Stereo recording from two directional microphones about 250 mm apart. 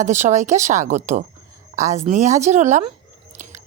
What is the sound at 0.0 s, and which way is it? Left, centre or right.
A woman's voice, right.